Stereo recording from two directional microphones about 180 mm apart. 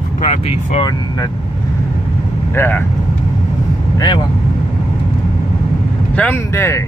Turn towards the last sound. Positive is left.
turn(degrees=15)  # may be behind; listen again after turning